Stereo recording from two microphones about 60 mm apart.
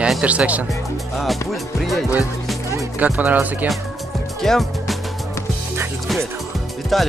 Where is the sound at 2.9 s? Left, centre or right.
Right.